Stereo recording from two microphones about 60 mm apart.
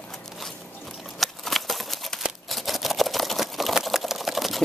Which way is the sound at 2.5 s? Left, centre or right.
Centre.